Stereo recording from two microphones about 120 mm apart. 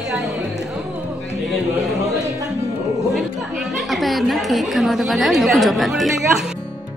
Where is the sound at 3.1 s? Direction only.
Centre (ahead or behind).